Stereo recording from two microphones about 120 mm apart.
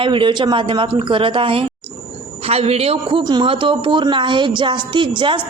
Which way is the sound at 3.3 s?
40° right (ahead or behind).